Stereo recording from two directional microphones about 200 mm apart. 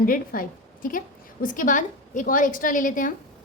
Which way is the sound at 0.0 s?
45° left (ahead or behind).